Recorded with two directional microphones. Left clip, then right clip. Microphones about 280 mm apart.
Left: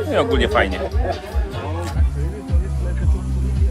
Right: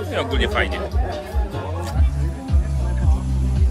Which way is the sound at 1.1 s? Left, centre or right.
Right.